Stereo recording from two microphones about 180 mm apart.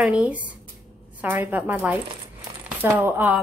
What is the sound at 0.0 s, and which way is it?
Speech, 10° right (ahead or behind).